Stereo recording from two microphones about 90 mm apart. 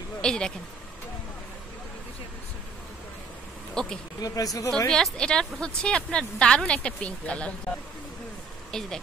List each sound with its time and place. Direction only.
0.2 s speech: 10° left (ahead or behind)
3.8 s speech: 5° left (ahead or behind)
4.2 s speech: 40° left (ahead or behind)
4.6 s speech: 10° left (ahead or behind)
8.7 s speech: 5° left (ahead or behind)